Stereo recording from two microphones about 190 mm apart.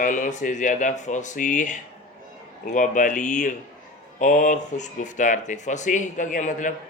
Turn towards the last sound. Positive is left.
turn(degrees=40)  # may be behind; listen again after turning